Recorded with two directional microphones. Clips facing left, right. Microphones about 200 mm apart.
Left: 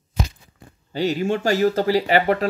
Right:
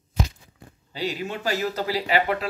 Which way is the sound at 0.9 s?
45° left (ahead or behind).